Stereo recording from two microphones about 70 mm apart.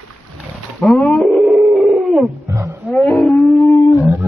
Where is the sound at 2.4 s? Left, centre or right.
Right.